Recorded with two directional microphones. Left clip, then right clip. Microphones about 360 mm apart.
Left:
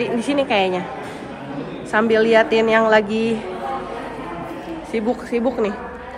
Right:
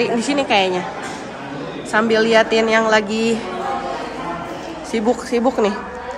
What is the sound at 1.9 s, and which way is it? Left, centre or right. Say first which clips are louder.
A woman's voice: even; centre.